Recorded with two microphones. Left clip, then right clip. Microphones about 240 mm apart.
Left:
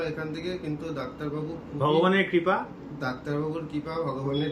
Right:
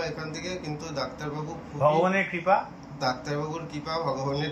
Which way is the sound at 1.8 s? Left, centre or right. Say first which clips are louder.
Even; left.